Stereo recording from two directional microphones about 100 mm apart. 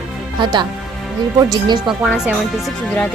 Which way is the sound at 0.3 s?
45° right (ahead or behind).